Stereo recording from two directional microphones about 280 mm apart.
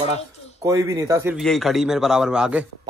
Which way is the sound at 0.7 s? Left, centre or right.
Centre.